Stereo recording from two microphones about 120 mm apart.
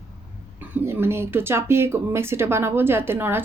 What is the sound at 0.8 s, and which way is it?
A woman's voice, 20° right (ahead or behind).